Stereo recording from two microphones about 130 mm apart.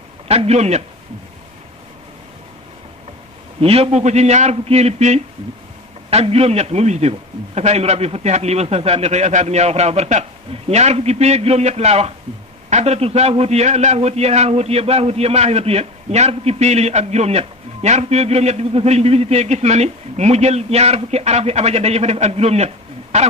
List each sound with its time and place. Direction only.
0.3 s a man's voice: 55° right (ahead or behind)
3.6 s a man's voice: 50° right (ahead or behind)